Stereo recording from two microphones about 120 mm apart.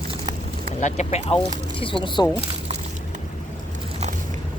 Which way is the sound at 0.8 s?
70° left (ahead or behind).